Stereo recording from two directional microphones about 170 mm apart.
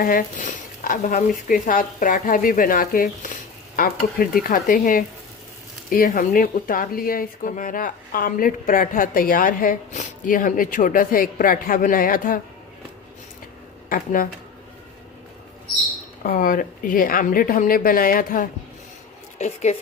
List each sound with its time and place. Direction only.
0.0 s speech: 55° left (ahead or behind)
13.9 s speech: 55° left (ahead or behind)
16.2 s speech: 55° left (ahead or behind)
19.4 s a woman's voice: 40° left (ahead or behind)